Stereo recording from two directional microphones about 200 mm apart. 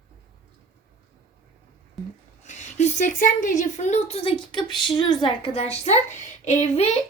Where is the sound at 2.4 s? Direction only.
35° left (ahead or behind).